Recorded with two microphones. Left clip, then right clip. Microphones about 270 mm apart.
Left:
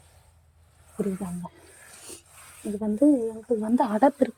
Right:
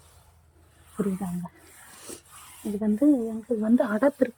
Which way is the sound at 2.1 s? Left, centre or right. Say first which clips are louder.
Right 3 dB; centre.